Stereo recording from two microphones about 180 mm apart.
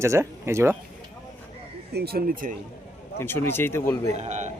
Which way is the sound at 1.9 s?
60° right (ahead or behind).